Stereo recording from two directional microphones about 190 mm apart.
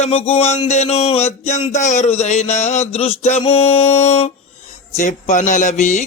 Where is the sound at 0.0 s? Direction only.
30° left (ahead or behind).